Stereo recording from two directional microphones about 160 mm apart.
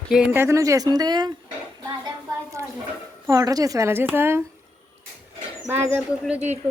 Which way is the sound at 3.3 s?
20° right (ahead or behind).